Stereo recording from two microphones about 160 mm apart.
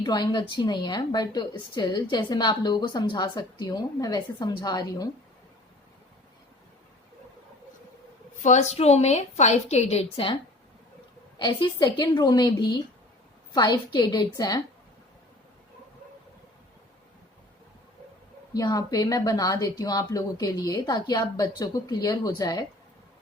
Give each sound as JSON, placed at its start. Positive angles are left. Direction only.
{"t": 0.0, "sound": "a woman's voice", "side_deg": 25}
{"t": 8.4, "sound": "a woman's voice", "side_deg": 45}
{"t": 11.3, "sound": "a woman's voice", "side_deg": 30}
{"t": 18.5, "sound": "a woman's voice", "side_deg": 25}